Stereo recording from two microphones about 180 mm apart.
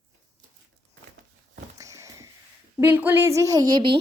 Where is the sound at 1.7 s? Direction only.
15° right (ahead or behind).